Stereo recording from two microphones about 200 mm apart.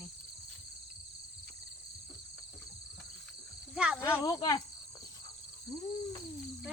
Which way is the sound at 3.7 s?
5° right (ahead or behind).